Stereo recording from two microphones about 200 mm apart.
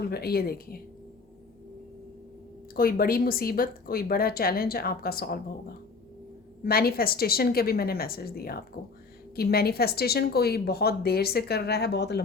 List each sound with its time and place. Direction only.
0.0 s speech: 50° left (ahead or behind)
2.7 s speech: 45° left (ahead or behind)